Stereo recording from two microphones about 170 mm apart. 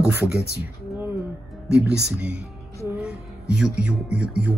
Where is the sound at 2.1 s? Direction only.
5° right (ahead or behind).